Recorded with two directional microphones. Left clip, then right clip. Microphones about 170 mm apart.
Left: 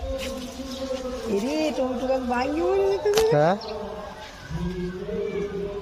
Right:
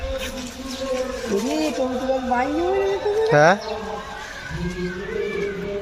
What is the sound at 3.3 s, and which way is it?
Speech, centre (ahead or behind).